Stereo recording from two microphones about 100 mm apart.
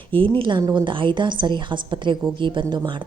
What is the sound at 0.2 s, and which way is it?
A woman's voice, 55° right (ahead or behind).